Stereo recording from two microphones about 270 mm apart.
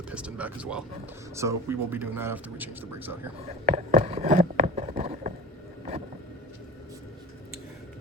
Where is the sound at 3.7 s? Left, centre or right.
Right.